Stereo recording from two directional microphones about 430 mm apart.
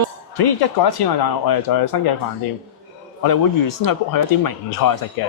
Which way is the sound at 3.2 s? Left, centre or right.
Left.